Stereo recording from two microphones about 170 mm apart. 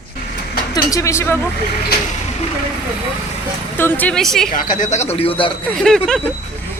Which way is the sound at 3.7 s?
10° left (ahead or behind).